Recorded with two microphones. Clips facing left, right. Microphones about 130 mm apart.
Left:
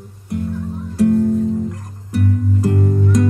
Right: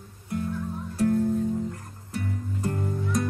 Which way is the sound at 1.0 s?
90° left.